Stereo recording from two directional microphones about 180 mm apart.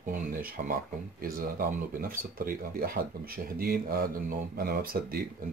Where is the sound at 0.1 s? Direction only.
50° right (ahead or behind).